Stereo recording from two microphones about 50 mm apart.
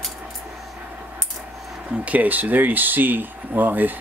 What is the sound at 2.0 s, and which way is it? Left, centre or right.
Speech, right.